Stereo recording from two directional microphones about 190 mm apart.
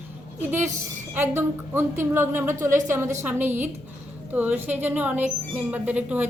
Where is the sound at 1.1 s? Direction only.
15° right (ahead or behind).